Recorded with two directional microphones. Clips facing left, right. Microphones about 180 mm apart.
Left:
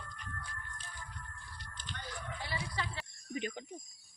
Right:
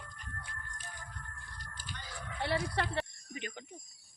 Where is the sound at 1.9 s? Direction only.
5° right (ahead or behind).